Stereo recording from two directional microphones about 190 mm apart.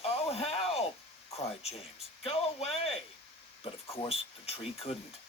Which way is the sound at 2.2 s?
30° left (ahead or behind).